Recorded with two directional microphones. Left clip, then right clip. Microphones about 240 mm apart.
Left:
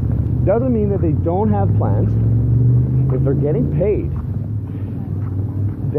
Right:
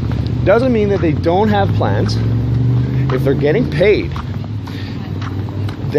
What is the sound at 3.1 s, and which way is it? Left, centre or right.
Speech, right.